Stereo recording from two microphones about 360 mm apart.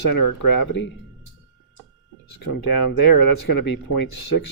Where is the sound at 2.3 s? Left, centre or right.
Left.